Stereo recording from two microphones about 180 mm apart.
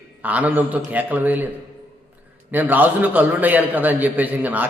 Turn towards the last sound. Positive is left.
turn(degrees=-10)  # may be behind; listen again after turning